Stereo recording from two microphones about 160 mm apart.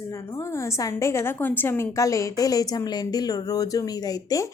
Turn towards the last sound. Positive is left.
turn(degrees=20)  # may be behind; listen again after turning